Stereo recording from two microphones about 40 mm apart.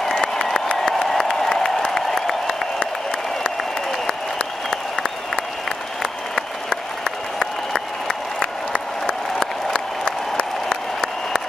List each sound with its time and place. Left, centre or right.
0.0 s a sound: centre
1.1 s applause: centre
7.1 s applause: centre
8.1 s applause: centre